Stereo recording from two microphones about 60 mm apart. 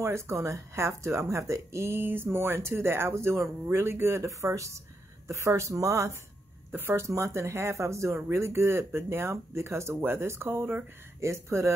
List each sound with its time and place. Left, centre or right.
0.0 s speech: right
4.3 s speech: right
5.8 s speech: right
6.7 s speech: right
7.1 s speech: right
11.1 s speech: right